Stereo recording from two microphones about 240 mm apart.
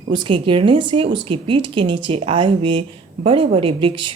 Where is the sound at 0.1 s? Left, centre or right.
Centre.